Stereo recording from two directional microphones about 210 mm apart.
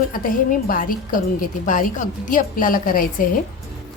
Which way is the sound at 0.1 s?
40° left (ahead or behind).